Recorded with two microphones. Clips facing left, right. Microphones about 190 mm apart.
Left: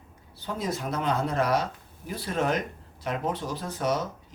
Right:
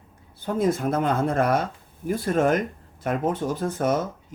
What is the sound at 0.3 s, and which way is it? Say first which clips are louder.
Speech: right 8 dB; 50° right (ahead or behind).